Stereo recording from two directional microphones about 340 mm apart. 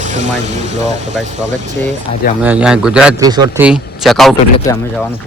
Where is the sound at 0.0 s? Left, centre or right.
Right.